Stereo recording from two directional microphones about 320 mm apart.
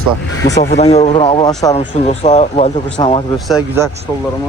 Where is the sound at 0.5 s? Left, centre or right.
Left.